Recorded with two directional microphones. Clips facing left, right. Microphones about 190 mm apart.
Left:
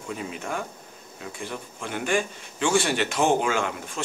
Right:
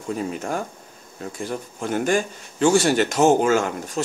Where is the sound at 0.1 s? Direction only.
40° right (ahead or behind).